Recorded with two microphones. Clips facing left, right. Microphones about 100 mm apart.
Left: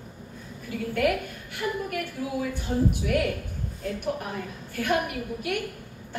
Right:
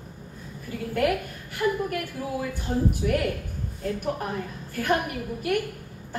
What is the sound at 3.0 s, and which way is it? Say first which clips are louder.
Speech: right 1 dB; 40° right (ahead or behind).